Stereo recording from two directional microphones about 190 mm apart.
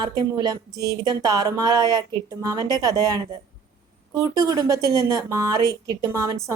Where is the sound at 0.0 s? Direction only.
25° right (ahead or behind).